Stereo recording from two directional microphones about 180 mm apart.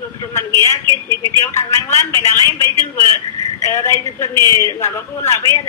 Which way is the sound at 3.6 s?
15° left (ahead or behind).